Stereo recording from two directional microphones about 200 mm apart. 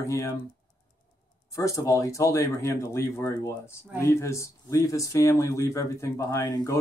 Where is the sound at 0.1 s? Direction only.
15° left (ahead or behind).